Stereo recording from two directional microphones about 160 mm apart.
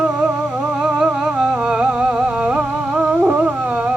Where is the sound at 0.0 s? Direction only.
5° right (ahead or behind).